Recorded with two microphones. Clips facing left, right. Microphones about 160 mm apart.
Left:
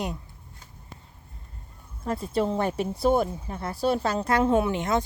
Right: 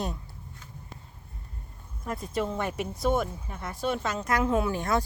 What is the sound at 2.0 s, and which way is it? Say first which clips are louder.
Speech: left 4 dB; 30° left (ahead or behind).